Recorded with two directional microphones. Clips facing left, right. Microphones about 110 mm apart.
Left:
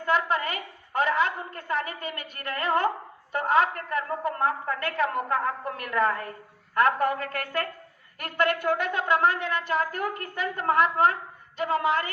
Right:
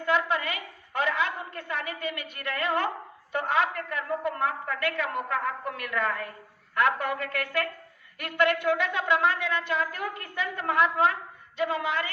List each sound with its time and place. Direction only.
0.0 s a woman's voice: 40° left (ahead or behind)